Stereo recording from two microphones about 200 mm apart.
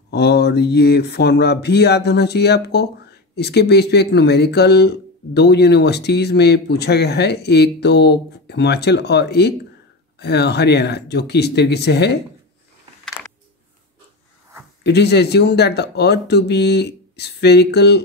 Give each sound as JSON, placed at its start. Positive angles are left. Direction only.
{"t": 0.1, "sound": "speech", "side_deg": 55}
{"t": 14.8, "sound": "speech", "side_deg": 55}